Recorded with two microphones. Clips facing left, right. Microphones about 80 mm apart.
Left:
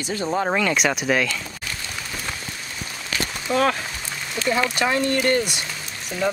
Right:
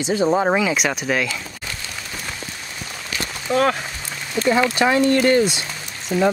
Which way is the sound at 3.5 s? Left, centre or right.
Right.